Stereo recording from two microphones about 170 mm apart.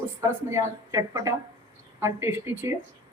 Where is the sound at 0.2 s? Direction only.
15° right (ahead or behind).